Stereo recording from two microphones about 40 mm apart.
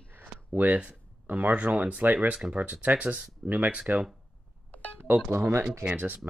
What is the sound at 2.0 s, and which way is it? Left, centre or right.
Speech, right.